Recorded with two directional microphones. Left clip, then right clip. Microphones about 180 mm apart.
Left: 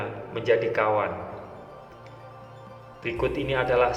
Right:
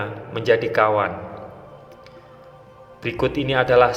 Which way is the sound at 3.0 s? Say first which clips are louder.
Right 5 dB; 30° right (ahead or behind).